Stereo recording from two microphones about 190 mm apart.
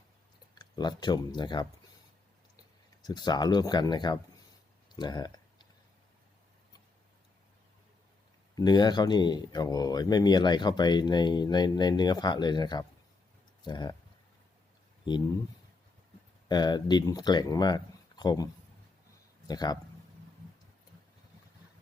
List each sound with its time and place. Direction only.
0.5 s speech: 20° left (ahead or behind)
3.1 s speech: 20° left (ahead or behind)
4.9 s a sound: 20° left (ahead or behind)
8.5 s speech: 20° left (ahead or behind)
16.5 s speech: 20° left (ahead or behind)
19.5 s speech: 20° left (ahead or behind)